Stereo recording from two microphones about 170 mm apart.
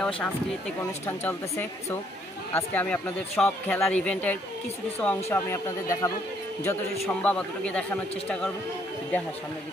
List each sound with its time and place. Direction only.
0.0 s speech: 5° left (ahead or behind)